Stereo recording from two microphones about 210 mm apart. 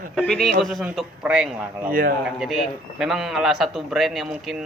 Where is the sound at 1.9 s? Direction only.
45° right (ahead or behind).